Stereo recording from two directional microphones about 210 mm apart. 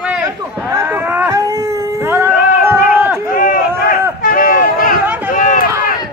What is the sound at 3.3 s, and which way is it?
Run, 40° left (ahead or behind).